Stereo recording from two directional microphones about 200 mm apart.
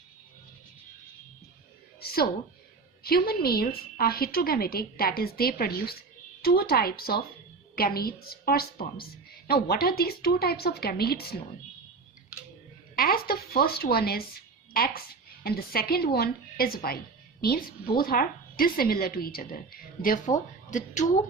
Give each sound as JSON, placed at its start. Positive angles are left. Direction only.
{"t": 2.0, "sound": "a woman's voice", "side_deg": 50}
{"t": 13.0, "sound": "a woman's voice", "side_deg": 50}